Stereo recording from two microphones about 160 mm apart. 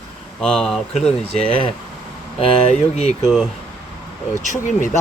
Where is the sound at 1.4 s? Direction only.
35° left (ahead or behind).